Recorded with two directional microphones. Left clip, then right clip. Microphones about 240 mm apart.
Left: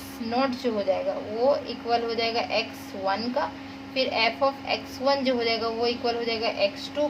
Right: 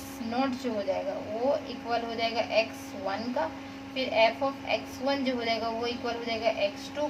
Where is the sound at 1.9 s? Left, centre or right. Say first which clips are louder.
Left 5 dB; left.